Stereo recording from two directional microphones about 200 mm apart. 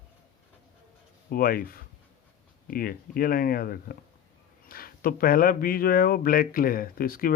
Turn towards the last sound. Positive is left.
turn(degrees=45)  # may be behind; listen again after turning